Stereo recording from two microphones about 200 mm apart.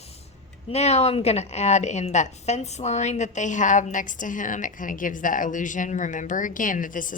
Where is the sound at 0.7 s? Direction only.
35° left (ahead or behind).